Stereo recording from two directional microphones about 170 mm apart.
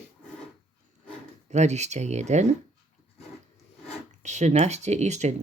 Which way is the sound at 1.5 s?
40° right (ahead or behind).